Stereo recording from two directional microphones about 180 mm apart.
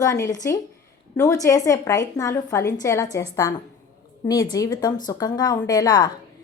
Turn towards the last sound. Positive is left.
turn(degrees=20)  # may be behind; listen again after turning